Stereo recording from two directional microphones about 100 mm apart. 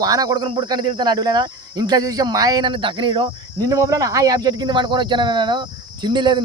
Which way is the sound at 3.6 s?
35° right (ahead or behind).